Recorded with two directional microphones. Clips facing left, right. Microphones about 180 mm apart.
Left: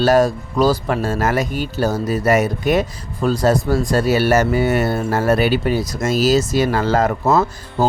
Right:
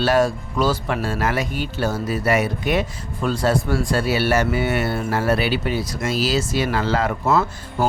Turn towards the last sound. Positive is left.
turn(degrees=40)  # may be behind; listen again after turning